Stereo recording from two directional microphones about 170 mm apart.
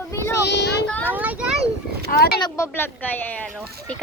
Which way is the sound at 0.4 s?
80° left.